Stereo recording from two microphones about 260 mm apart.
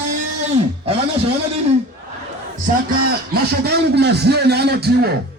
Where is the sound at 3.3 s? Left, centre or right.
Right.